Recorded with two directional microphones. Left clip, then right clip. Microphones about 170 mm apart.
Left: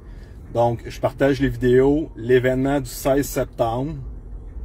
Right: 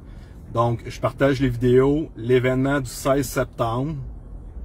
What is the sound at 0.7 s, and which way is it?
Speech, 10° right (ahead or behind).